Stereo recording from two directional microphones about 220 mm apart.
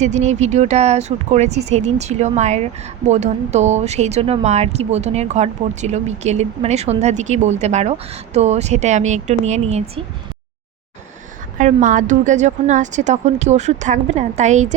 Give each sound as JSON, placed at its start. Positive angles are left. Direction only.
{"t": 0.0, "sound": "speech", "side_deg": -30}
{"t": 11.5, "sound": "speech", "side_deg": -35}